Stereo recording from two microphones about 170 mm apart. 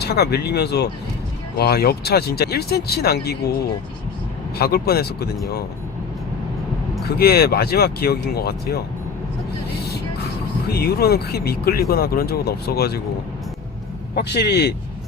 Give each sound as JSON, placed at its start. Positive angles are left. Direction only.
{"t": 0.0, "sound": "speech", "side_deg": 70}
{"t": 4.5, "sound": "speech", "side_deg": 65}
{"t": 7.2, "sound": "speech", "side_deg": 65}
{"t": 10.7, "sound": "speech", "side_deg": 70}
{"t": 14.2, "sound": "speech", "side_deg": 75}